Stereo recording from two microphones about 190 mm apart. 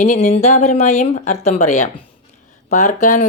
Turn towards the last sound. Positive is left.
turn(degrees=45)  # may be behind; listen again after turning